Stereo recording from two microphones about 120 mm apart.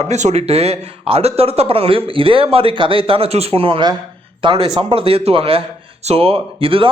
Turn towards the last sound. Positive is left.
turn(degrees=-50)  # may be behind; listen again after turning